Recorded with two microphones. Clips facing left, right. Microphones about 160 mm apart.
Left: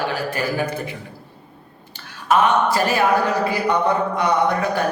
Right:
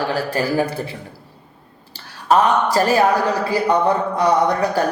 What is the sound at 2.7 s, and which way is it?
Speech, 35° right (ahead or behind).